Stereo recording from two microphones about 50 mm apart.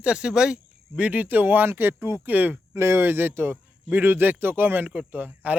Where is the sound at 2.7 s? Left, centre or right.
Right.